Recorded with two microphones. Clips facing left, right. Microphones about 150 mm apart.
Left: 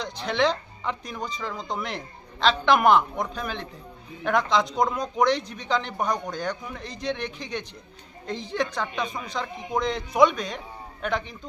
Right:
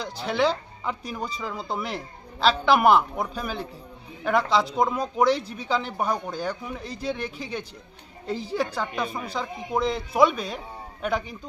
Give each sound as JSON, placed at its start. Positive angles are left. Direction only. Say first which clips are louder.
{"t": 0.0, "sound": "a woman's voice", "louder": "even", "side_deg": -5}